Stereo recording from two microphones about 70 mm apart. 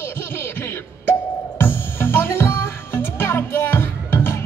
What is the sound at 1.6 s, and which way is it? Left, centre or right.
Music, left.